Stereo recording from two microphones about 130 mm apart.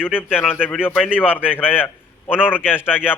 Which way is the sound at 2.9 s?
5° right (ahead or behind).